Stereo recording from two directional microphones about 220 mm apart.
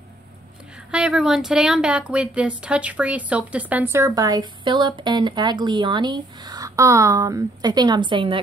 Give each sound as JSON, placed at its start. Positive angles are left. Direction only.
{"t": 0.9, "sound": "speech", "side_deg": -5}